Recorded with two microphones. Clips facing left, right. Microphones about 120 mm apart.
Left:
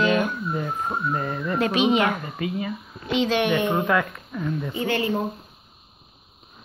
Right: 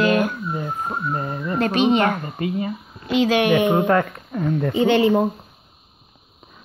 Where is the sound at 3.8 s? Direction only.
40° right (ahead or behind).